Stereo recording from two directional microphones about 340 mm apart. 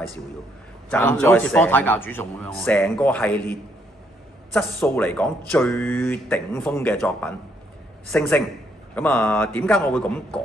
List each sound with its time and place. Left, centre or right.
0.8 s speech: centre
4.6 s speech: centre